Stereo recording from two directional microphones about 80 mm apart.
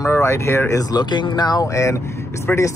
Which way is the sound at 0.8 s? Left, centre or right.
Left.